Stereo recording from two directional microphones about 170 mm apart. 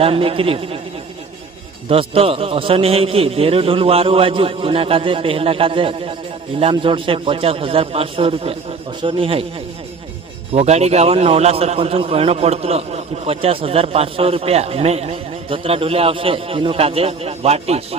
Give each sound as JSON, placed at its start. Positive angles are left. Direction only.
{"t": 0.0, "sound": "a man's voice", "side_deg": -35}
{"t": 1.9, "sound": "a man's voice", "side_deg": -35}
{"t": 10.5, "sound": "a man's voice", "side_deg": -40}